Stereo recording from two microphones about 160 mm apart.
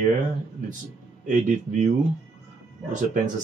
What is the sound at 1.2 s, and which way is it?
Speech, 50° right (ahead or behind).